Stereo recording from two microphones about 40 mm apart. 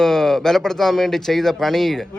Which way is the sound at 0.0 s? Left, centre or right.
Centre.